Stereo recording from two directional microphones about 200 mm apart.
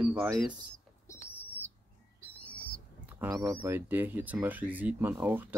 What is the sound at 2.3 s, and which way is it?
Owl, 5° left (ahead or behind).